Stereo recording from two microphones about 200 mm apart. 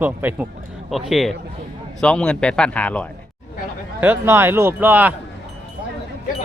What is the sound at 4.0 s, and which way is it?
Speech, 10° right (ahead or behind).